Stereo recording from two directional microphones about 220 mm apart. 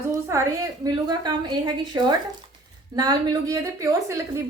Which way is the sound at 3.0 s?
15° right (ahead or behind).